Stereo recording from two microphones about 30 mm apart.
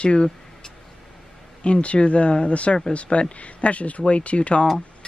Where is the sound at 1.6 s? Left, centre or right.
Left.